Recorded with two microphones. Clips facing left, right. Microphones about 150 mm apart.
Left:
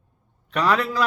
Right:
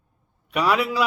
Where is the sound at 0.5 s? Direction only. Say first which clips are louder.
Even; 10° right (ahead or behind).